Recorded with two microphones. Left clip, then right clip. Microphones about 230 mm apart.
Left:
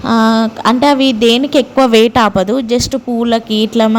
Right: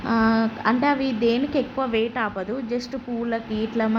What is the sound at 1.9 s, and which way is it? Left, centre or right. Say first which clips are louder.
A woman's voice: left 15 dB; left.